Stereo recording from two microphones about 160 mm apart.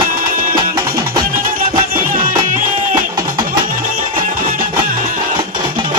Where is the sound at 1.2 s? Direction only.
65° right (ahead or behind).